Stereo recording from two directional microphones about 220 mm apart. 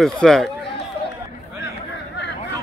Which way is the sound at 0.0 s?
Centre (ahead or behind).